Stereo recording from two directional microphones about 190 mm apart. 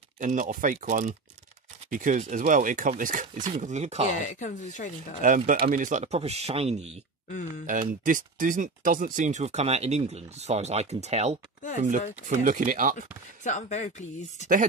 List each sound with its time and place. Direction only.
0.2 s speech: 40° right (ahead or behind)
4.2 s speech: 40° left (ahead or behind)
5.7 s speech: 45° right (ahead or behind)
7.2 s speech: 40° left (ahead or behind)
7.6 s speech: 45° right (ahead or behind)
12.9 s speech: 40° left (ahead or behind)